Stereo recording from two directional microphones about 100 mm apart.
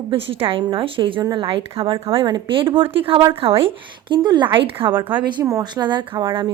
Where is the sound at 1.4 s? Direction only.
70° right (ahead or behind).